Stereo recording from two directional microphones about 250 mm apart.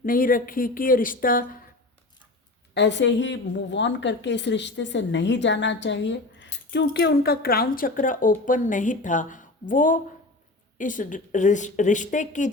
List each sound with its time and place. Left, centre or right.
0.0 s speech: left
2.7 s a woman's voice: left